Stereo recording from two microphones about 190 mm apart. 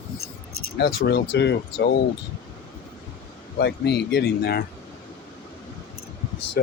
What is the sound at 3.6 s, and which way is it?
Speech, 60° left (ahead or behind).